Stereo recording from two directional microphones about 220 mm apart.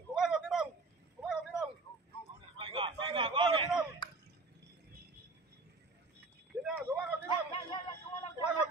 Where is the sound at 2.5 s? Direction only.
25° right (ahead or behind).